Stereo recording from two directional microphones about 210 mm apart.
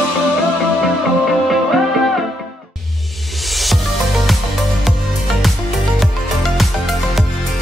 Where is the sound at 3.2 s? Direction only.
Centre (ahead or behind).